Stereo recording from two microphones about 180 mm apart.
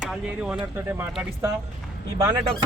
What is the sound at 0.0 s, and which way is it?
Speech, 5° right (ahead or behind).